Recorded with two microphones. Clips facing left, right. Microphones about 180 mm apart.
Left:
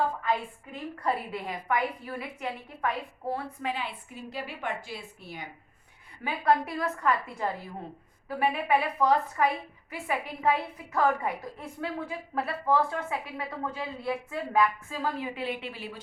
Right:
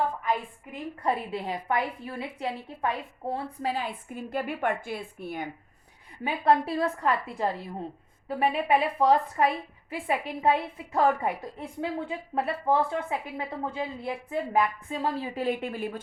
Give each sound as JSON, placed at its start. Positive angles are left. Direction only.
{"t": 0.2, "sound": "a woman's voice", "side_deg": -15}
{"t": 1.3, "sound": "a woman's voice", "side_deg": -25}
{"t": 6.2, "sound": "a woman's voice", "side_deg": -30}